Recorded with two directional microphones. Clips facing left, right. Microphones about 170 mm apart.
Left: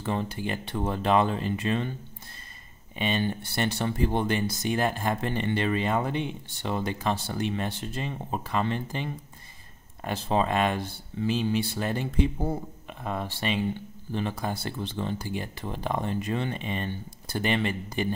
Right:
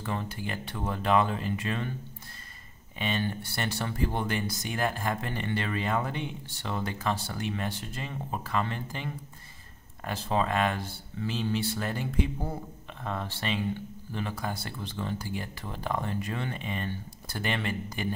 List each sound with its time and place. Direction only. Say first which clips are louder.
0.0 s speech: left 4 dB; 20° left (ahead or behind)
3.0 s speech: left 3 dB; 20° left (ahead or behind)
13.0 s speech: left 3 dB; 15° left (ahead or behind)
14.1 s speech: left 4 dB; 25° left (ahead or behind)